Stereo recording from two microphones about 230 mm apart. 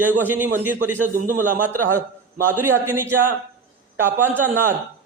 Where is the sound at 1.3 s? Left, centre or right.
Right.